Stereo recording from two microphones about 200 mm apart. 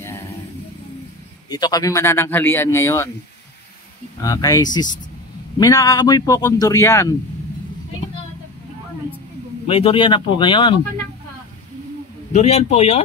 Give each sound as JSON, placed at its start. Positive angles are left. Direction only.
{"t": 1.5, "sound": "speech", "side_deg": 20}
{"t": 4.2, "sound": "speech", "side_deg": 15}
{"t": 9.7, "sound": "speech", "side_deg": 30}
{"t": 12.3, "sound": "a man's voice", "side_deg": 35}